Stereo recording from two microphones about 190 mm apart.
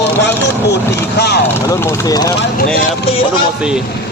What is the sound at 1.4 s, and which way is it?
Vehicle, 15° left (ahead or behind).